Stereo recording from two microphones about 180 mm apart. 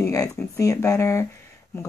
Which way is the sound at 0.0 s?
15° left (ahead or behind).